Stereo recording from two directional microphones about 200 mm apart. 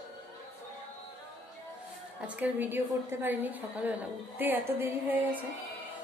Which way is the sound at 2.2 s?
10° right (ahead or behind).